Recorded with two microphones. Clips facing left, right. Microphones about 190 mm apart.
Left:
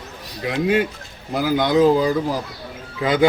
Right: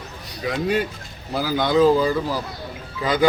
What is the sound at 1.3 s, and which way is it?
A man's voice, 15° left (ahead or behind).